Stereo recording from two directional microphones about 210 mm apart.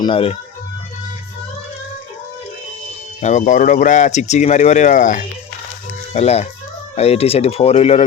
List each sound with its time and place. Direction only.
0.0 s speech: 25° left (ahead or behind)
3.2 s speech: 35° left (ahead or behind)